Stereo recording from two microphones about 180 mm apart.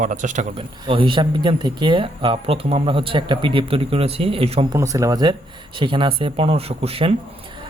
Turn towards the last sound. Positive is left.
turn(degrees=-30)  # may be behind; listen again after turning